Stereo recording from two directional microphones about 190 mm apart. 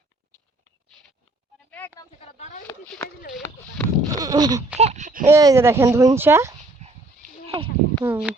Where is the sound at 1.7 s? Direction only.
10° left (ahead or behind).